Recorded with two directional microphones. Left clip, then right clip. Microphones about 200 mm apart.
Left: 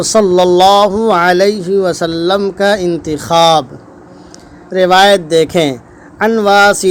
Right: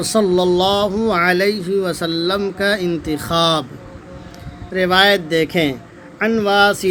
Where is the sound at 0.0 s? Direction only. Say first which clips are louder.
Left 7 dB; 15° left (ahead or behind).